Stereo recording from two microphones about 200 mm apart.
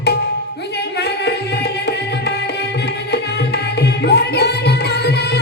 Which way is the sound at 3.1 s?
55° left (ahead or behind).